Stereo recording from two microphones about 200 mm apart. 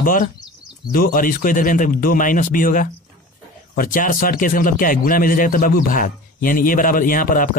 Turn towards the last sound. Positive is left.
turn(degrees=45)  # may be behind; listen again after turning